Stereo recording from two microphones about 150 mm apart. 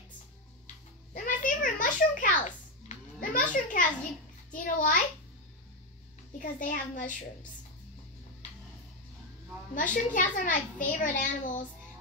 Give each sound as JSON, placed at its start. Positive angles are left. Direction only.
{"t": 1.1, "sound": "a sound", "side_deg": 65}
{"t": 4.5, "sound": "a child's voice", "side_deg": 60}
{"t": 6.3, "sound": "a child's voice", "side_deg": 60}
{"t": 9.8, "sound": "a child's voice", "side_deg": 60}